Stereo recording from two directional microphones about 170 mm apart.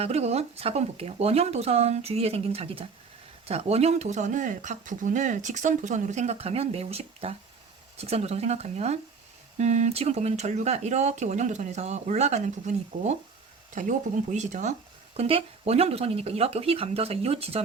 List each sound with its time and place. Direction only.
0.0 s speech: 40° right (ahead or behind)